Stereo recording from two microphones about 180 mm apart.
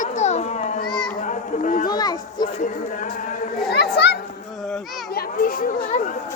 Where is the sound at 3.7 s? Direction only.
65° left (ahead or behind).